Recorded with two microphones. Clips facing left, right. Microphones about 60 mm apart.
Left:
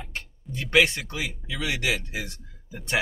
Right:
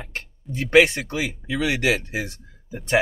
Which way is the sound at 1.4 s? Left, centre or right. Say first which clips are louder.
Right 6 dB; right.